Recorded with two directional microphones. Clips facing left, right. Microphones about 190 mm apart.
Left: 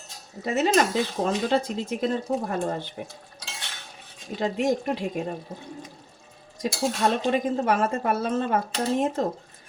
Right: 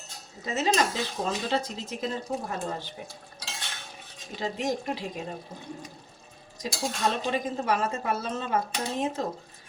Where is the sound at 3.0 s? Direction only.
55° left (ahead or behind).